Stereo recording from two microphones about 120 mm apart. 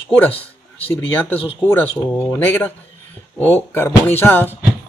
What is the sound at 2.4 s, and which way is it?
Speech, 15° left (ahead or behind).